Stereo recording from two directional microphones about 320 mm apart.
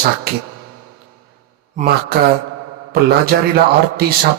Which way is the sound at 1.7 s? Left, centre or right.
Right.